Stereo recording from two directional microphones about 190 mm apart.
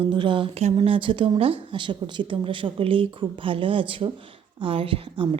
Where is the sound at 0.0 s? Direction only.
25° right (ahead or behind).